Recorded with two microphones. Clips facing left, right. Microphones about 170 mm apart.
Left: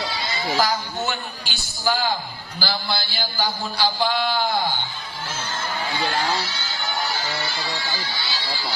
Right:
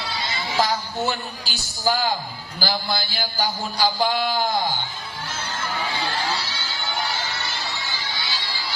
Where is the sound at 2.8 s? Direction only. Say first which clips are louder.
Right 1 dB; 45° right (ahead or behind).